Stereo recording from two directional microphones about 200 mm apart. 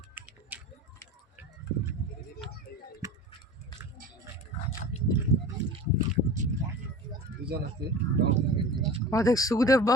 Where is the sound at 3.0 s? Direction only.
15° right (ahead or behind).